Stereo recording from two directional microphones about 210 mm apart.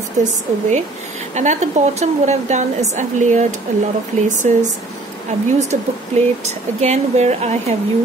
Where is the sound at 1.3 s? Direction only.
35° right (ahead or behind).